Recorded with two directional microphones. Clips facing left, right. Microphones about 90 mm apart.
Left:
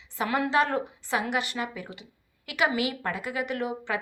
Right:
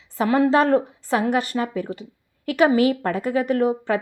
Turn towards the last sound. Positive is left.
turn(degrees=-40)  # may be behind; listen again after turning